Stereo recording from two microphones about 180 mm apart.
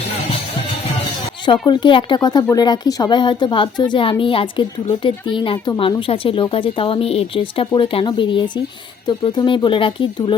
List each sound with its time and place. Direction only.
1.6 s speech: 25° left (ahead or behind)